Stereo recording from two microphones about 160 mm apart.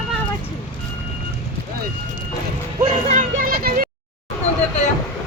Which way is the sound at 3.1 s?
65° right (ahead or behind).